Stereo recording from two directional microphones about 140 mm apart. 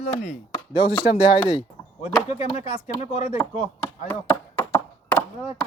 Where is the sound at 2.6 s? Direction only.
55° left (ahead or behind).